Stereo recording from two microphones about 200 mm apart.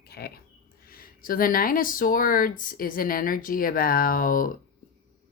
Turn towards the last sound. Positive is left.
turn(degrees=45)  # may be behind; listen again after turning